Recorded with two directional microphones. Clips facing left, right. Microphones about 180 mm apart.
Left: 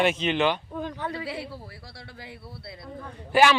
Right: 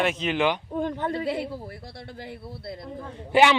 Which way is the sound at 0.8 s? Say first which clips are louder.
Right 5 dB; 50° right (ahead or behind).